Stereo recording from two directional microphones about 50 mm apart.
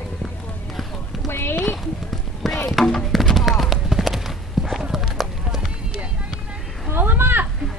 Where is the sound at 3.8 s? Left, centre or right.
Centre.